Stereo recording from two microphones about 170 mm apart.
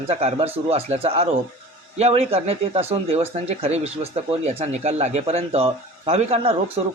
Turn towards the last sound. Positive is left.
turn(degrees=-35)  # may be behind; listen again after turning